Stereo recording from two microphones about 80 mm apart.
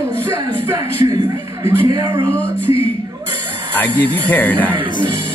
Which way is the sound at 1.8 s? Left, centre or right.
Right.